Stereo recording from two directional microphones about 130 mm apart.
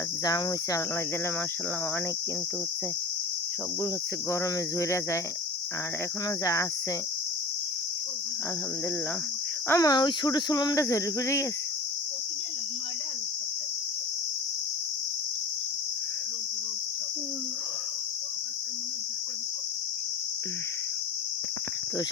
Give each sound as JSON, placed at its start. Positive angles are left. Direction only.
{"t": 0.3, "sound": "speech", "side_deg": 30}
{"t": 4.8, "sound": "speech", "side_deg": 25}
{"t": 6.4, "sound": "speech", "side_deg": 25}
{"t": 9.6, "sound": "speech", "side_deg": 25}